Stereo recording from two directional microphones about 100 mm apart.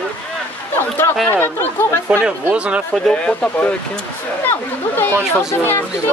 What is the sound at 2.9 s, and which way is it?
Speech, 10° left (ahead or behind).